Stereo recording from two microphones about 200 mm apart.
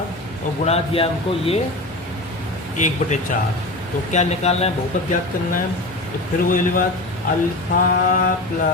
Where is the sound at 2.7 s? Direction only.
40° left (ahead or behind).